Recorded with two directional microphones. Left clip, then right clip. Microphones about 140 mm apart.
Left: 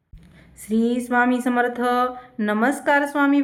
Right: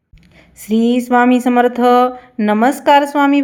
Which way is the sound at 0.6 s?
45° right (ahead or behind).